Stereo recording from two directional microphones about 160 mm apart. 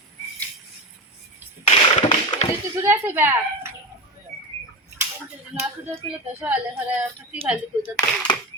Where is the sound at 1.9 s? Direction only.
35° left (ahead or behind).